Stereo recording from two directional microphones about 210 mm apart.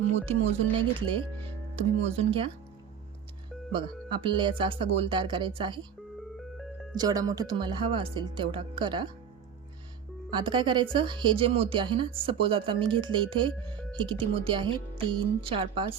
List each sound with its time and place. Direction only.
0.8 s speech: 25° right (ahead or behind)
3.7 s speech: 25° right (ahead or behind)
6.9 s speech: 20° right (ahead or behind)
10.3 s speech: 20° right (ahead or behind)